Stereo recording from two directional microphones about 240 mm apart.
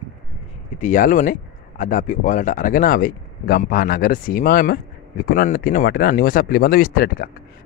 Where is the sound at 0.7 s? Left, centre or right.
Left.